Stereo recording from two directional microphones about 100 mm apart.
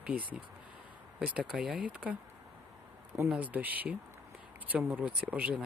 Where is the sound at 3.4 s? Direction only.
15° right (ahead or behind).